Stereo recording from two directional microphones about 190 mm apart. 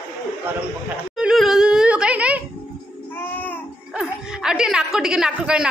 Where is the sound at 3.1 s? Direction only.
10° left (ahead or behind).